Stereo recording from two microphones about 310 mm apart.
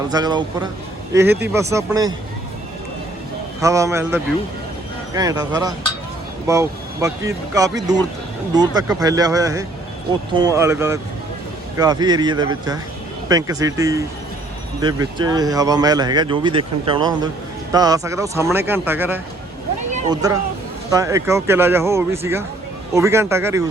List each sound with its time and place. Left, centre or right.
0.1 s speech: centre
3.6 s speech: centre
19.9 s speech: right
20.9 s speech: centre